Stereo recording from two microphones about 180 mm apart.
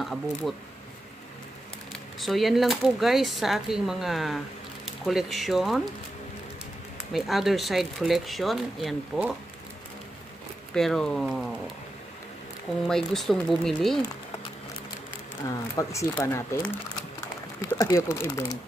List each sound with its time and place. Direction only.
0.0 s speech: centre (ahead or behind)
1.9 s speech: centre (ahead or behind)
7.1 s speech: centre (ahead or behind)
10.7 s speech: 5° left (ahead or behind)
12.8 s speech: centre (ahead or behind)
15.7 s speech: 15° left (ahead or behind)
17.6 s speech: 20° left (ahead or behind)